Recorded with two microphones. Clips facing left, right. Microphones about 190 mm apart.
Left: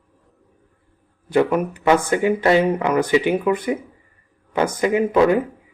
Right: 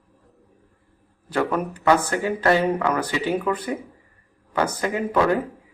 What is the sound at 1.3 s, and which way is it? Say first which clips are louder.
Speech: left 6 dB; 20° left (ahead or behind).